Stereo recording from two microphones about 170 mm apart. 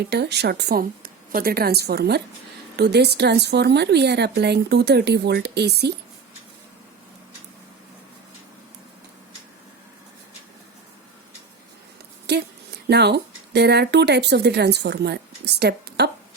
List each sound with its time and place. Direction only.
0.0 s speech: 75° right (ahead or behind)
12.2 s speech: 75° right (ahead or behind)